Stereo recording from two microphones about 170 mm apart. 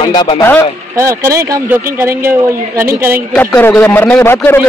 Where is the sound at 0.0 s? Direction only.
25° left (ahead or behind).